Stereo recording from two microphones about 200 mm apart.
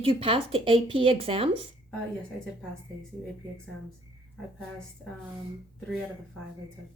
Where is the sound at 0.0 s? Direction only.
25° right (ahead or behind).